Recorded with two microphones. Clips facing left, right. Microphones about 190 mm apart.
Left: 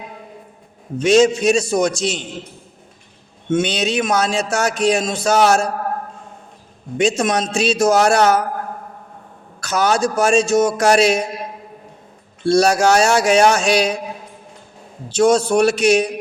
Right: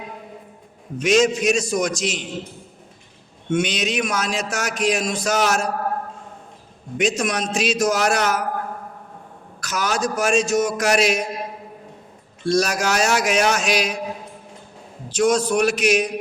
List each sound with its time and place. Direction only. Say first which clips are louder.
0.9 s speech: left 4 dB; 30° left (ahead or behind)
3.5 s speech: left 3 dB; 30° left (ahead or behind)
6.9 s speech: left 4 dB; 30° left (ahead or behind)
9.6 s speech: left 6 dB; 30° left (ahead or behind)
12.5 s speech: left 6 dB; 30° left (ahead or behind)
15.1 s speech: left 4 dB; 30° left (ahead or behind)